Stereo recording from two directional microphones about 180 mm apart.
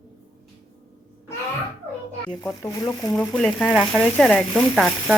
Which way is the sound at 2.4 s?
20° left (ahead or behind).